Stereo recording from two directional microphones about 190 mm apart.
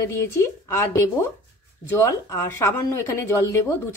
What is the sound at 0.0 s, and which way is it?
A woman's voice, 15° left (ahead or behind).